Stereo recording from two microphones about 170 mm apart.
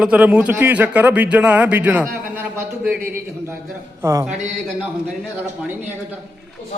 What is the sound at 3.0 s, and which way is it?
Speech, 55° right (ahead or behind).